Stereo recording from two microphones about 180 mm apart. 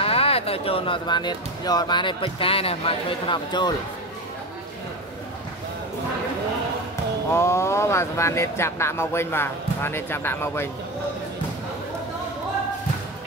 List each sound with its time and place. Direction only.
0.0 s speech: 30° left (ahead or behind)
7.3 s speech: 15° left (ahead or behind)